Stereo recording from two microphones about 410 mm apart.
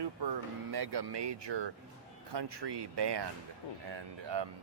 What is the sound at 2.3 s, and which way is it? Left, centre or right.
Speech, right.